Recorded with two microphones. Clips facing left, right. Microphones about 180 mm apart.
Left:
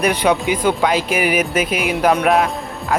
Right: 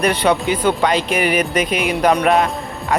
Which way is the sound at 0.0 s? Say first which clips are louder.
Even; 10° left (ahead or behind).